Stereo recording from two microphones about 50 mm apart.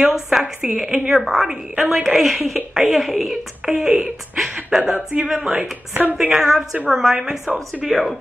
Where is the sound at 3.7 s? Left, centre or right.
Centre.